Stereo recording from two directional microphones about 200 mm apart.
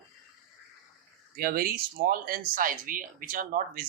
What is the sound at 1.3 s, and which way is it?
Speech, 50° right (ahead or behind).